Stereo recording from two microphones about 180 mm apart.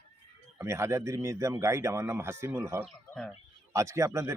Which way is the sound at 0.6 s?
15° right (ahead or behind).